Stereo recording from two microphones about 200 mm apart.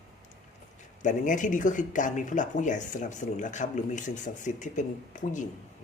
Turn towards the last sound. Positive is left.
turn(degrees=40)  # may be behind; listen again after turning